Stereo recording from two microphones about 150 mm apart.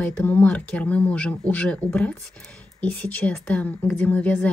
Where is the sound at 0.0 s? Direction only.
10° left (ahead or behind).